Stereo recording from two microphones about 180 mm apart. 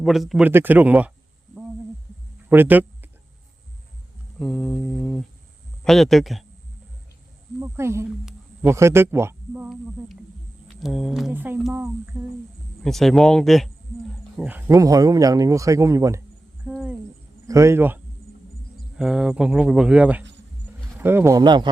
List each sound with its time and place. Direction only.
0.0 s speech: centre (ahead or behind)
2.5 s a sound: 10° right (ahead or behind)
4.4 s mantra: centre (ahead or behind)
5.8 s speech: centre (ahead or behind)
7.6 s speech: 15° right (ahead or behind)
8.2 s a sound: 5° right (ahead or behind)
8.7 s speech: 15° right (ahead or behind)
14.7 s speech: 20° right (ahead or behind)
16.6 s a sound: 10° right (ahead or behind)
17.4 s speech: 15° right (ahead or behind)